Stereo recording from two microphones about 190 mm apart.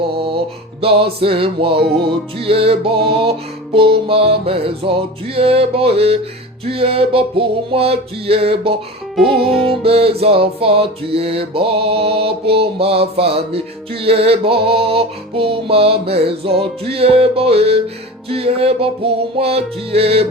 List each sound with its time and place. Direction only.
0.8 s music: 30° right (ahead or behind)
9.1 s music: centre (ahead or behind)
9.8 s music: 30° right (ahead or behind)